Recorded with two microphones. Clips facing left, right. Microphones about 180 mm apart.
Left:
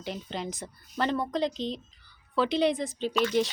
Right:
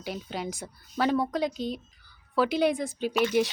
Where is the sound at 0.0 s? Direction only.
5° right (ahead or behind).